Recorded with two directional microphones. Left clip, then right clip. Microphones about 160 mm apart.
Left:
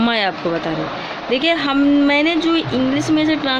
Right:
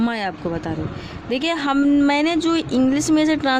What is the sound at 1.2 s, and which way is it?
A woman's voice, 70° right (ahead or behind).